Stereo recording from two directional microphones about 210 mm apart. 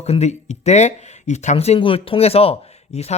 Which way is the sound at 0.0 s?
30° left (ahead or behind).